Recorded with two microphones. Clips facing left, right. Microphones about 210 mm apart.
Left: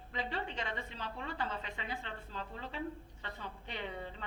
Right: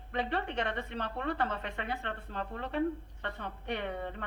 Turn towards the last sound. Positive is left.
turn(degrees=-60)  # may be behind; listen again after turning